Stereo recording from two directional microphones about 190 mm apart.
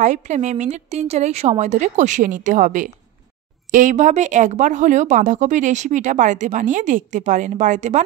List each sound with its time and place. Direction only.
0.0 s speech: 40° right (ahead or behind)